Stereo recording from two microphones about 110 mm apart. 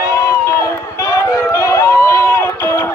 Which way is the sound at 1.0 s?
25° left (ahead or behind).